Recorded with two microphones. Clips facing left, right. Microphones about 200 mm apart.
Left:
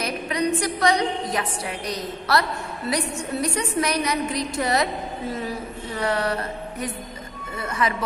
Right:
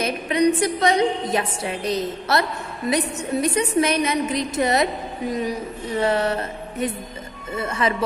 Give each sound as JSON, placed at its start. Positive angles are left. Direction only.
{"t": 0.0, "sound": "a woman's voice", "side_deg": -25}
{"t": 7.5, "sound": "a woman's voice", "side_deg": -25}